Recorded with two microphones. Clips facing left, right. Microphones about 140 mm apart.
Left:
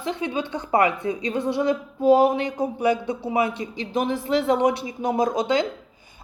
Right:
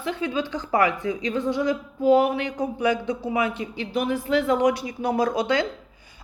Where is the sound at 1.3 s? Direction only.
70° left (ahead or behind).